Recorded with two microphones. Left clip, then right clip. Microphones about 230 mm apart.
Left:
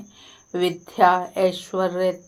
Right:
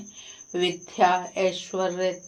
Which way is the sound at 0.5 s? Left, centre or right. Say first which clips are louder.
Left 3 dB; left.